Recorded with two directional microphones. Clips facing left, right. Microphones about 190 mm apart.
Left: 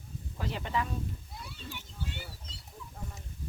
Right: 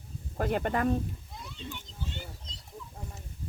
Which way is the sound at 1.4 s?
5° left (ahead or behind).